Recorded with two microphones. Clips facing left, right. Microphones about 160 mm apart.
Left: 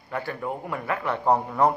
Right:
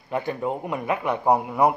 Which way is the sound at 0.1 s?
20° right (ahead or behind).